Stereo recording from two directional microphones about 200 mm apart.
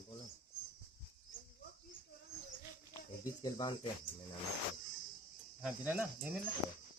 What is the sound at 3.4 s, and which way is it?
Cricket, 25° left (ahead or behind).